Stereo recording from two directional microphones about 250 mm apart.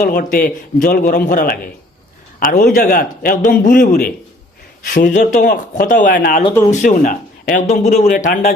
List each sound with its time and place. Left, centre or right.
0.0 s speech: left